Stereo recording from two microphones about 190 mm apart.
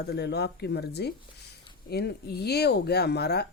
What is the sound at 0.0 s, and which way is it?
Speech, 60° left (ahead or behind).